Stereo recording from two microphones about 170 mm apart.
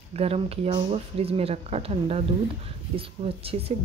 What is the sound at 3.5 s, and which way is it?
Speech, 35° right (ahead or behind).